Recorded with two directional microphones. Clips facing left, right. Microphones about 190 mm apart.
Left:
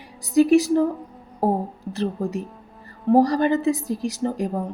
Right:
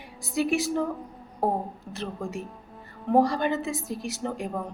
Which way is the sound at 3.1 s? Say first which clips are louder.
Left 5 dB; 35° left (ahead or behind).